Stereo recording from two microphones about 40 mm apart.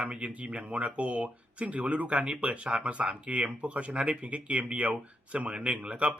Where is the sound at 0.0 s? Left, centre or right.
Right.